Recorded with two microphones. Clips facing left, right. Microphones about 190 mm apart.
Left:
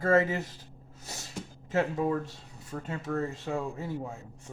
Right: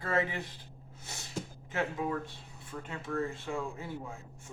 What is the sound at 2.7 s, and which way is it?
Speech, 45° left (ahead or behind).